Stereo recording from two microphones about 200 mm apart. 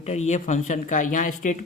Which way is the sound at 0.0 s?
35° left (ahead or behind).